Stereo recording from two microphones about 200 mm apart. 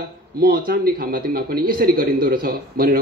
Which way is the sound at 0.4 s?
50° right (ahead or behind).